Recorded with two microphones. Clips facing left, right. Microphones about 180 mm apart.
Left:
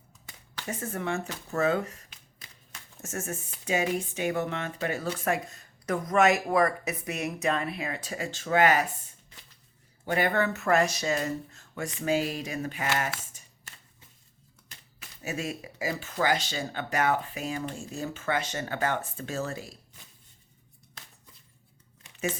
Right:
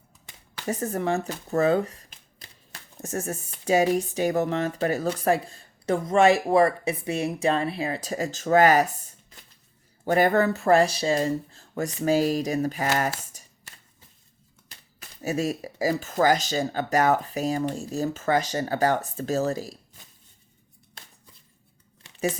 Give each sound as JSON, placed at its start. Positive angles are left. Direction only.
{"t": 0.6, "sound": "speech", "side_deg": -40}
{"t": 14.7, "sound": "speech", "side_deg": -40}